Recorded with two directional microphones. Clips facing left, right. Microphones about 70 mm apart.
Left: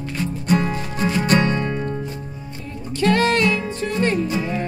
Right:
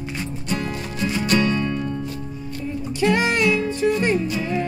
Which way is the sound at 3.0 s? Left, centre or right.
Centre.